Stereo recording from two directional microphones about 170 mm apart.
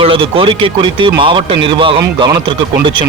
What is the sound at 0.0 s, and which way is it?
Speech, 30° right (ahead or behind).